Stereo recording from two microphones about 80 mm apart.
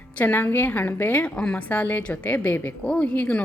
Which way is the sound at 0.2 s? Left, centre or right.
Left.